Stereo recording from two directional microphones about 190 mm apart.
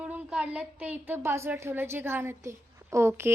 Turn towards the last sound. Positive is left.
turn(degrees=-15)  # may be behind; listen again after turning